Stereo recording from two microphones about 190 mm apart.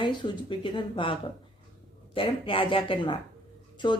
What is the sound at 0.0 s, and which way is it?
Speech, 25° left (ahead or behind).